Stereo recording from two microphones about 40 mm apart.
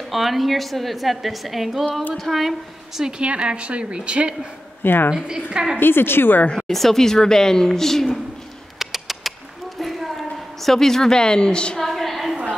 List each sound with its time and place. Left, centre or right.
0.1 s a woman's voice: centre
3.0 s a woman's voice: right
4.8 s speech: left
5.1 s a woman's voice: centre
5.8 s a woman's voice: left
6.7 s a woman's voice: centre
8.7 s bird: centre
9.8 s a sound: centre; by 11.8 s left
11.8 s a sound: centre